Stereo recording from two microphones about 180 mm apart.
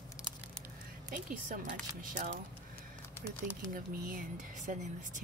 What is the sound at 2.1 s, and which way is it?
Speech, 65° right (ahead or behind).